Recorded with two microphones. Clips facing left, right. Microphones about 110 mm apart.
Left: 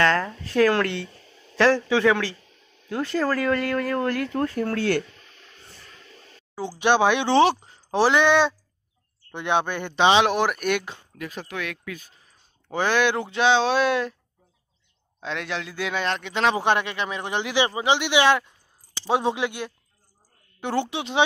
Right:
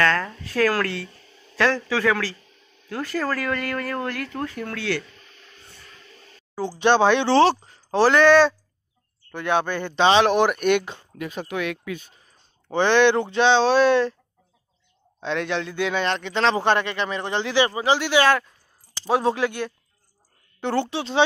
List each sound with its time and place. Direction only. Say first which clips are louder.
0.0 s speech: left 1 dB; 20° left (ahead or behind)
4.4 s speech: left 5 dB; 35° left (ahead or behind)
6.8 s a man's voice: right 2 dB; 15° left (ahead or behind)
10.3 s speech: right 4 dB; 5° left (ahead or behind)
15.1 s a man's voice: right 5 dB; centre (ahead or behind)